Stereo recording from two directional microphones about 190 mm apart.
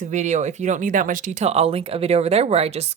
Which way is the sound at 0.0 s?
40° right (ahead or behind).